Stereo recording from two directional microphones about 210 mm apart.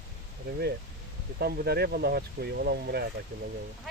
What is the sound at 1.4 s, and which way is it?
Speech, 50° right (ahead or behind).